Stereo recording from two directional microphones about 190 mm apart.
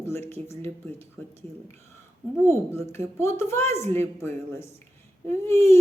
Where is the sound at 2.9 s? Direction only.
15° left (ahead or behind).